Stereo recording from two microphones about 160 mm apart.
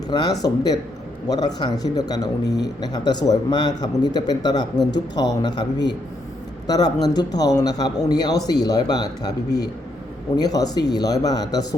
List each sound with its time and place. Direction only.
0.1 s speech: 25° left (ahead or behind)
2.4 s a man's voice: 90° left
2.8 s speech: 25° left (ahead or behind)
10.3 s speech: 25° left (ahead or behind)